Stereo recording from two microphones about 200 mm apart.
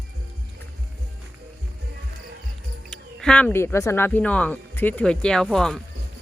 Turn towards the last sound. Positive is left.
turn(degrees=0)  # may be behind; listen again after turning